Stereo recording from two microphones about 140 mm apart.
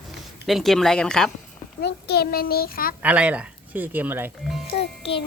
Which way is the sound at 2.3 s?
90° left.